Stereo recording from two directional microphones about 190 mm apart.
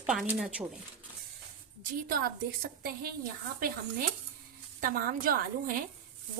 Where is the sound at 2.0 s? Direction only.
50° right (ahead or behind).